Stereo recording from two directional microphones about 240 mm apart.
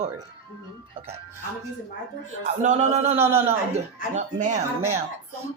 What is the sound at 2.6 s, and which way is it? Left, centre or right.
Speech, right.